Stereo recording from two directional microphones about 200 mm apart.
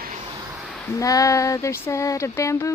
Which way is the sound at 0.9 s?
15° left (ahead or behind).